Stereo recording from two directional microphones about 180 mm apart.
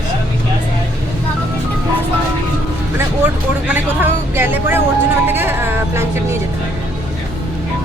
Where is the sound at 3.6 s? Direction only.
10° right (ahead or behind).